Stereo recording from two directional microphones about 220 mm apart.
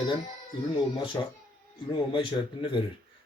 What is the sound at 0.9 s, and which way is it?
Speech, 20° left (ahead or behind).